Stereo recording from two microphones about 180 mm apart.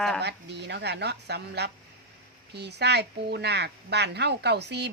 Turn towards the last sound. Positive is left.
turn(degrees=-70)  # may be behind; listen again after turning